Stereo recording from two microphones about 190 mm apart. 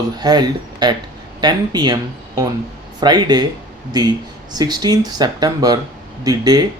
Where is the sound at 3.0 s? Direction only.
20° right (ahead or behind).